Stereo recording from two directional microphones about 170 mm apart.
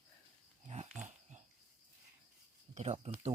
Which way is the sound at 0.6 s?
40° right (ahead or behind).